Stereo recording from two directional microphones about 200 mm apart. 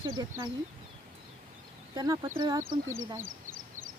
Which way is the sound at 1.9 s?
20° right (ahead or behind).